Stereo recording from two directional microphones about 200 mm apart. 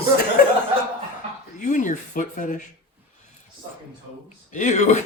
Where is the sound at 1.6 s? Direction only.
40° left (ahead or behind).